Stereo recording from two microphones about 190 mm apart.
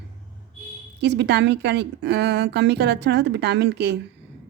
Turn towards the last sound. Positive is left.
turn(degrees=-60)  # may be behind; listen again after turning